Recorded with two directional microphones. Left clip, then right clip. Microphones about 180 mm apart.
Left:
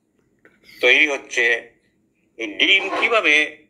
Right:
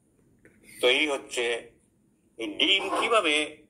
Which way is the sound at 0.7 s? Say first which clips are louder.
Left 8 dB; 10° left (ahead or behind).